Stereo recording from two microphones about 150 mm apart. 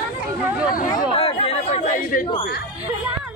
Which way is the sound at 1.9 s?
65° left (ahead or behind).